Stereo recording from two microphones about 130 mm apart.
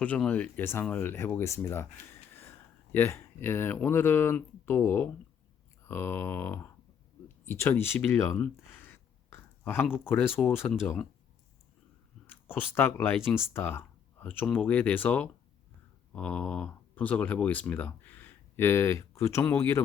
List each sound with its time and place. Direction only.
0.3 s speech: 10° left (ahead or behind)
8.4 s a sound: 15° left (ahead or behind)
9.8 s speech: 10° left (ahead or behind)
12.3 s speech: 15° left (ahead or behind)